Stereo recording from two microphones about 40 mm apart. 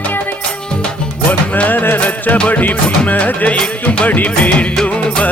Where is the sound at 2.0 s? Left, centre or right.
Left.